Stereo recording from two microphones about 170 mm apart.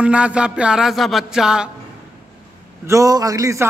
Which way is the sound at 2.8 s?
20° right (ahead or behind).